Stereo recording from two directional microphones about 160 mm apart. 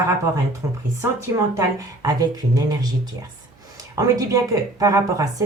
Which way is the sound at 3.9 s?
20° right (ahead or behind).